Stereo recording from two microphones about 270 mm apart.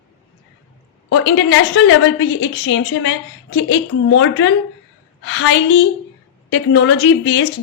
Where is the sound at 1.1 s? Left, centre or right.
Left.